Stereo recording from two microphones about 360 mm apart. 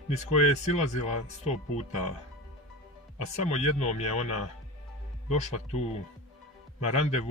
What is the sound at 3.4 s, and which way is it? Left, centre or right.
Speech, centre.